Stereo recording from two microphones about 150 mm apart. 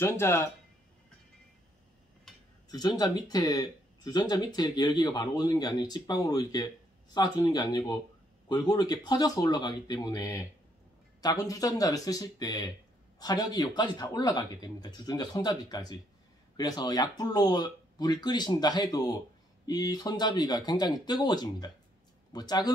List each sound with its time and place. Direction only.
0.0 s speech: 15° left (ahead or behind)
2.7 s speech: 25° left (ahead or behind)